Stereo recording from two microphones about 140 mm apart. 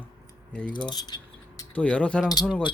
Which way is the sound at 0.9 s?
30° left (ahead or behind).